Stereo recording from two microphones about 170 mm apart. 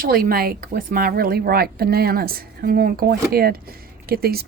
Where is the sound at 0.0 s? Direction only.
60° right (ahead or behind).